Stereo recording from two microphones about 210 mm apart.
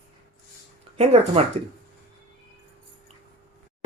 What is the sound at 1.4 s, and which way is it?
Speech, 30° right (ahead or behind).